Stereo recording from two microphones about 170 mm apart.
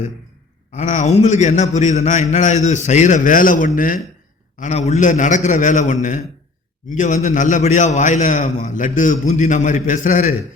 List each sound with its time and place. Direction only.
0.7 s a man's voice: 45° left (ahead or behind)